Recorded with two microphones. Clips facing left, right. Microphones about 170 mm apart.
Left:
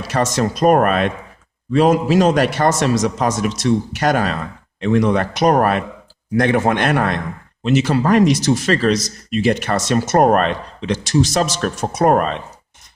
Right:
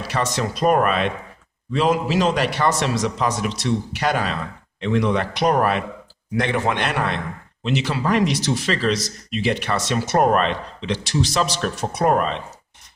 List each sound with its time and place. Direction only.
0.1 s speech: 45° left (ahead or behind)